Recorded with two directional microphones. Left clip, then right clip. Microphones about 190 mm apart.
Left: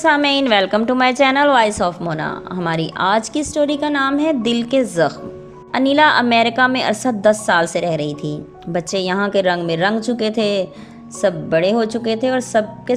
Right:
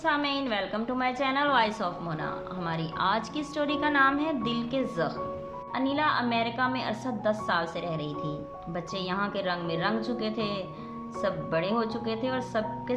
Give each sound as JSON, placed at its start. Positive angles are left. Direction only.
{"t": 0.0, "sound": "a woman's voice", "side_deg": 40}